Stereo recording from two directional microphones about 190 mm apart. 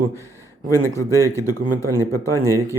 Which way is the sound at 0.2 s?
15° left (ahead or behind).